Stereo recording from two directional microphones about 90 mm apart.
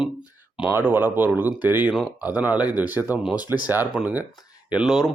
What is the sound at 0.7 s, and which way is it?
Speech, 25° right (ahead or behind).